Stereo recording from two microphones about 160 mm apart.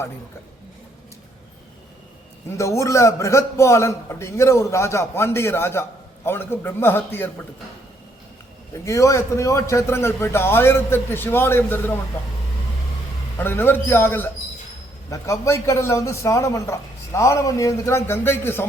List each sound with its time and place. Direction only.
2.6 s a man's voice: 20° left (ahead or behind)
8.8 s a man's voice: 20° left (ahead or behind)
13.4 s a man's voice: 15° left (ahead or behind)